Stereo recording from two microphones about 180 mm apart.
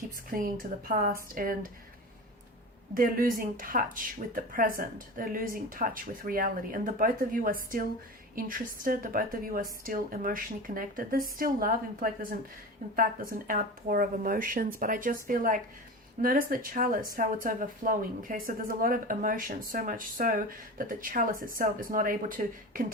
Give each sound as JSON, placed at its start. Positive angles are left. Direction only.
{"t": 0.3, "sound": "a woman's voice", "side_deg": -50}
{"t": 2.9, "sound": "a woman's voice", "side_deg": -50}
{"t": 13.5, "sound": "a woman's voice", "side_deg": -50}